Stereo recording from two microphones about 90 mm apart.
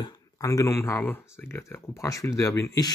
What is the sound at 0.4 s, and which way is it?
Speech, 35° left (ahead or behind).